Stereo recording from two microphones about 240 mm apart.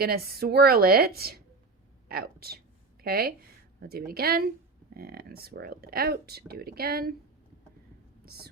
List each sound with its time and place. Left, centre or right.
0.0 s speech: right
8.2 s speech: right